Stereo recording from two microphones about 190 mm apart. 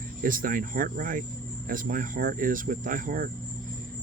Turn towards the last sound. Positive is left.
turn(degrees=-45)  # may be behind; listen again after turning